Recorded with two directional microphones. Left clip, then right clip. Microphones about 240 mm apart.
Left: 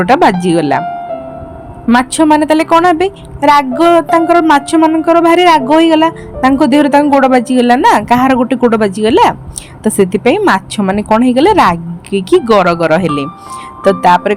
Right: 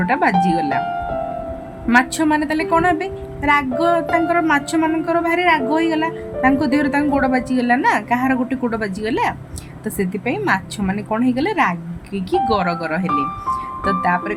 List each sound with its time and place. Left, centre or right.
0.0 s a woman's voice: left
1.9 s a woman's voice: left